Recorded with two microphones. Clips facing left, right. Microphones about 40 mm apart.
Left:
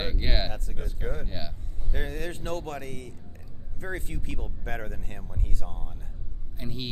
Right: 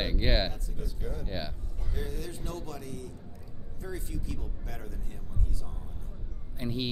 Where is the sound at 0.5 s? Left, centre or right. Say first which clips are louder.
Left 3 dB; left.